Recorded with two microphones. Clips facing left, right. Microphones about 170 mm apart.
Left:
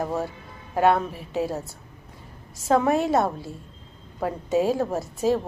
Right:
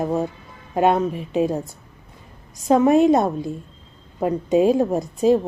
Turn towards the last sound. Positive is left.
turn(degrees=-20)  # may be behind; listen again after turning